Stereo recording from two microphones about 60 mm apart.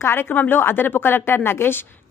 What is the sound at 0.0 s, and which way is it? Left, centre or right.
A woman's voice, left.